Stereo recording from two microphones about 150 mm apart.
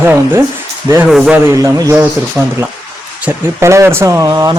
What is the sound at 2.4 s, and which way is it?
Speech, 5° right (ahead or behind).